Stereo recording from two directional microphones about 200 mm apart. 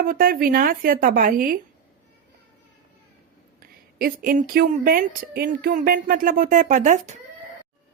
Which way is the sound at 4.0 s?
45° right (ahead or behind).